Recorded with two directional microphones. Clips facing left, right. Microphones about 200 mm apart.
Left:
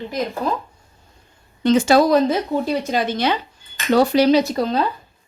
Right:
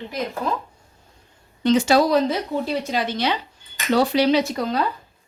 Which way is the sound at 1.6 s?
50° left (ahead or behind).